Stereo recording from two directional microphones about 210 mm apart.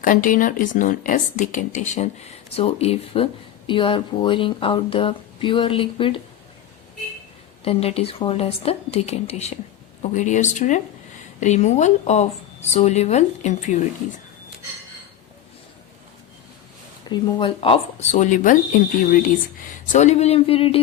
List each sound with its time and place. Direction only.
0.0 s speech: 40° left (ahead or behind)
7.6 s speech: 30° left (ahead or behind)
17.1 s speech: 20° left (ahead or behind)